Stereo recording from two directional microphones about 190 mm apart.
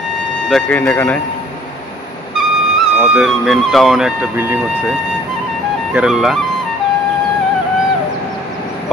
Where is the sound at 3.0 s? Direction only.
Centre (ahead or behind).